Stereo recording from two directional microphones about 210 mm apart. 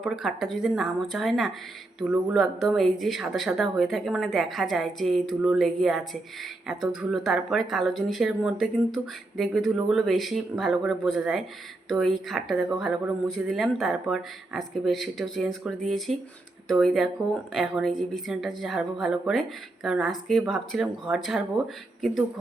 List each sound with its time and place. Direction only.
0.0 s speech: centre (ahead or behind)